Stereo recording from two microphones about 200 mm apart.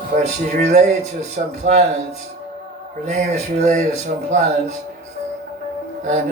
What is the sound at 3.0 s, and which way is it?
Speech, 35° right (ahead or behind).